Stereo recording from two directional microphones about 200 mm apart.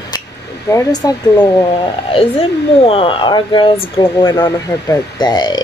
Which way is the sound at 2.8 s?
30° left (ahead or behind).